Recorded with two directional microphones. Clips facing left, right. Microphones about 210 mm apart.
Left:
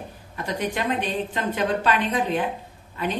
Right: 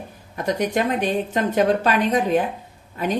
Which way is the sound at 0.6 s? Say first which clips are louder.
Right 3 dB; 45° right (ahead or behind).